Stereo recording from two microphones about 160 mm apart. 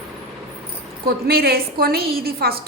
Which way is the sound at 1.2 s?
75° right (ahead or behind).